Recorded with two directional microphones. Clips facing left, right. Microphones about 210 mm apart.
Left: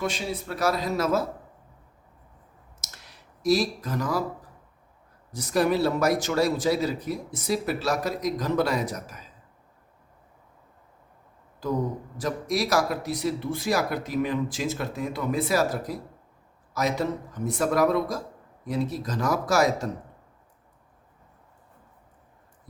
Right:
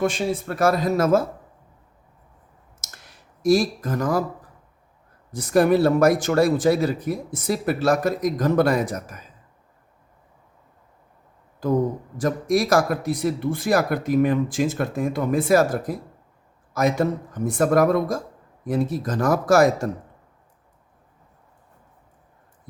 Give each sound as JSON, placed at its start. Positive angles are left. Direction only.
{"t": 0.0, "sound": "speech", "side_deg": -50}
{"t": 2.8, "sound": "clicking", "side_deg": -50}
{"t": 5.3, "sound": "speech", "side_deg": -50}
{"t": 11.6, "sound": "speech", "side_deg": -50}